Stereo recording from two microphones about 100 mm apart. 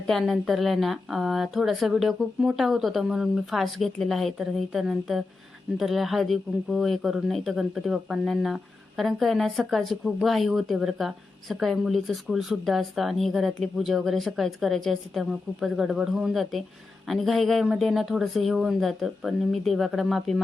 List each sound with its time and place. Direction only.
0.1 s a woman's voice: centre (ahead or behind)